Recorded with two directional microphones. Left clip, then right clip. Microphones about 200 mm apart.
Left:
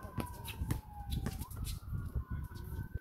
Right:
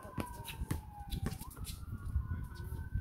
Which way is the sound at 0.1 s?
5° right (ahead or behind).